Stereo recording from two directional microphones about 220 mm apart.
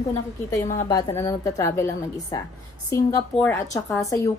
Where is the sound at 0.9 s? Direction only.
15° left (ahead or behind).